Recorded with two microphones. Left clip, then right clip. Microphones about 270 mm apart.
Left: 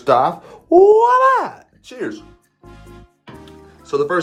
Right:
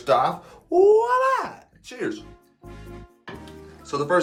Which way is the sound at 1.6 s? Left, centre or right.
Centre.